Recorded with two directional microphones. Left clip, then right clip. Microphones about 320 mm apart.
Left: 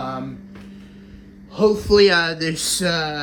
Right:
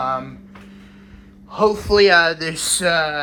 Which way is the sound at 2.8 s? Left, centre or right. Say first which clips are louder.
Right 6 dB; centre.